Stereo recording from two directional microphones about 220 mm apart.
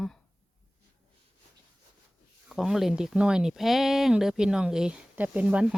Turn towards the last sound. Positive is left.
turn(degrees=-5)  # may be behind; listen again after turning